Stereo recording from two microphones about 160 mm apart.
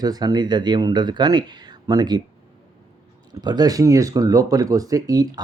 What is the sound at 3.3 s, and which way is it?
Speech, 25° right (ahead or behind).